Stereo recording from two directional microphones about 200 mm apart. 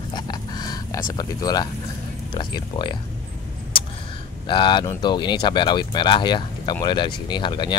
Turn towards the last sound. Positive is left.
turn(degrees=20)  # may be behind; listen again after turning